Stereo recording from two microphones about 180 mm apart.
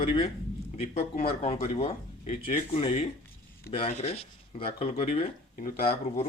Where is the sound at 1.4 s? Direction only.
35° left (ahead or behind).